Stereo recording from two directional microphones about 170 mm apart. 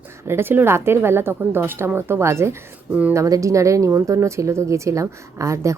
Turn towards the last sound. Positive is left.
turn(degrees=-20)  # may be behind; listen again after turning